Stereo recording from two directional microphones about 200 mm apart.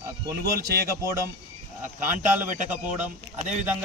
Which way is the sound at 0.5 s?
50° right (ahead or behind).